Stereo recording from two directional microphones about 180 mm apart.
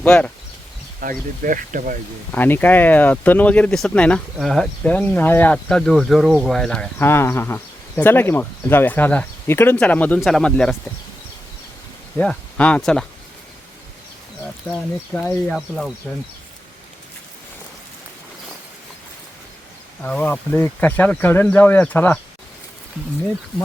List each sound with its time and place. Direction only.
0.0 s speech: 10° left (ahead or behind)
1.0 s speech: 50° right (ahead or behind)
2.3 s speech: 10° left (ahead or behind)
12.1 s speech: 5° left (ahead or behind)
14.7 s speech: 5° left (ahead or behind)
20.0 s speech: 10° left (ahead or behind)